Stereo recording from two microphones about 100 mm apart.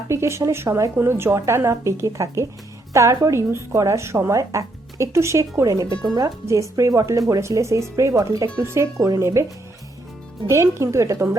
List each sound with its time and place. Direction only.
0.1 s a woman's voice: 25° right (ahead or behind)
10.5 s speech: 30° right (ahead or behind)